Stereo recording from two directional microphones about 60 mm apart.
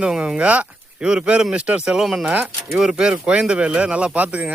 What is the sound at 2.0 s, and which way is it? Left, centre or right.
Speech, centre.